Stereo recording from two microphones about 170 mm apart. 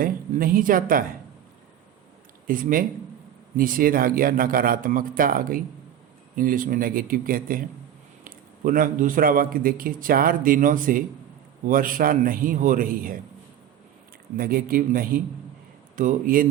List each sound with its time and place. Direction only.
0.0 s a man's voice: 55° right (ahead or behind)
2.5 s a man's voice: 55° right (ahead or behind)
14.3 s a man's voice: 55° right (ahead or behind)